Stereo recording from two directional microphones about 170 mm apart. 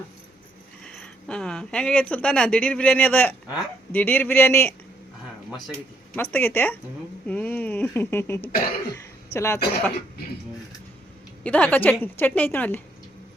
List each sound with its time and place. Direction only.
0.9 s speech: 5° left (ahead or behind)
5.5 s speech: centre (ahead or behind)
6.1 s speech: 10° left (ahead or behind)
7.3 s a sound: 10° left (ahead or behind)
8.9 s a woman's voice: 15° left (ahead or behind)
11.4 s speech: 5° left (ahead or behind)